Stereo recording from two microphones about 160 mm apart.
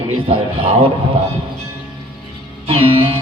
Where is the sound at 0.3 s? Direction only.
35° right (ahead or behind).